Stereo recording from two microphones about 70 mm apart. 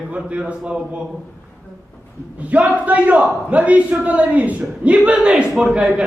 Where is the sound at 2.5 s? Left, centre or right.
Centre.